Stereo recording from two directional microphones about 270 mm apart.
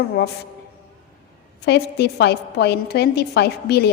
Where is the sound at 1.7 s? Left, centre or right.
Left.